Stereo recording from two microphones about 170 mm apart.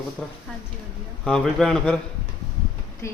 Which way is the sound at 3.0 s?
15° left (ahead or behind).